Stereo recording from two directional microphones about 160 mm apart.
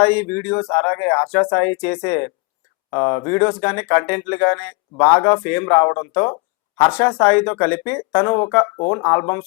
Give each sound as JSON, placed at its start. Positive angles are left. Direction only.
{"t": 0.0, "sound": "speech", "side_deg": 10}